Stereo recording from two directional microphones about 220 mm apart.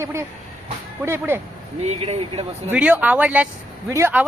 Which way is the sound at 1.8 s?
30° right (ahead or behind).